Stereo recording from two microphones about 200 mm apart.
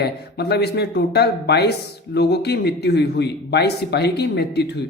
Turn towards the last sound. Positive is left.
turn(degrees=55)  # may be behind; listen again after turning